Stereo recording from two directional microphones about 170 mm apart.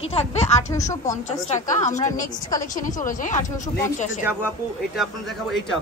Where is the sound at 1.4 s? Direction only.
45° left (ahead or behind).